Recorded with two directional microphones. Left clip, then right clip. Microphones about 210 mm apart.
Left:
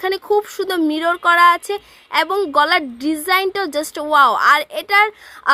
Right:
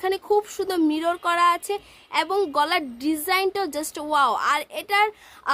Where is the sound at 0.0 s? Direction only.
15° left (ahead or behind).